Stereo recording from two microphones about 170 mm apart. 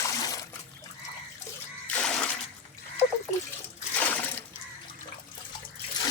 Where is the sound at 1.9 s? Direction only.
5° left (ahead or behind).